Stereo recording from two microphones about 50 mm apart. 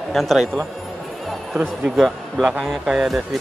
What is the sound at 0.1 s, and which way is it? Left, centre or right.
Speech, centre.